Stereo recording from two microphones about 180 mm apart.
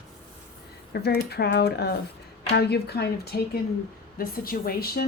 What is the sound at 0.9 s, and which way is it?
A woman's voice, 60° left (ahead or behind).